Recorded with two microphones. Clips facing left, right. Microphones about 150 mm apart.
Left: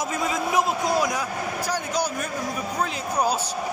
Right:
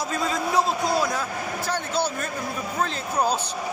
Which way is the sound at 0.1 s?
20° left (ahead or behind).